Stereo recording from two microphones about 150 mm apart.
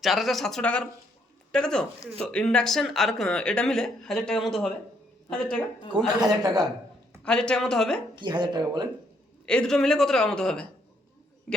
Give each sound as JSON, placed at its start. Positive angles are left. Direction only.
{"t": 0.0, "sound": "speech", "side_deg": 0}
{"t": 6.1, "sound": "speech", "side_deg": -25}
{"t": 7.3, "sound": "speech", "side_deg": 5}
{"t": 8.1, "sound": "speech", "side_deg": -30}
{"t": 9.5, "sound": "speech", "side_deg": 5}